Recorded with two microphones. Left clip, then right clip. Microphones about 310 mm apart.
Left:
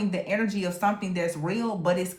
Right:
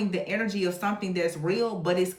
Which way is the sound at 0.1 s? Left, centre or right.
Centre.